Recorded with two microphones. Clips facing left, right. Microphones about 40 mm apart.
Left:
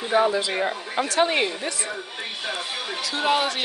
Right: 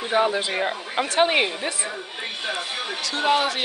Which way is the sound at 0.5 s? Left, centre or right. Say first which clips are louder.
Even; centre.